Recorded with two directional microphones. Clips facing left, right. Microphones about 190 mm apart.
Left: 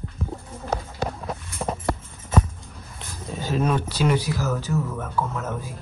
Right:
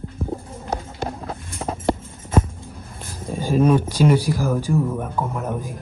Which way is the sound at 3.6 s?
10° right (ahead or behind).